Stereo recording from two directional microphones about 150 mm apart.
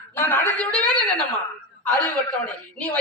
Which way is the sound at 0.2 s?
15° left (ahead or behind).